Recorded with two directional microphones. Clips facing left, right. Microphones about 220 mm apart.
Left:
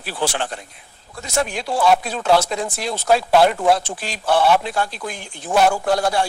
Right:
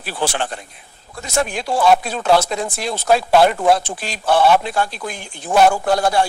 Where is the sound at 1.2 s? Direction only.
50° right (ahead or behind).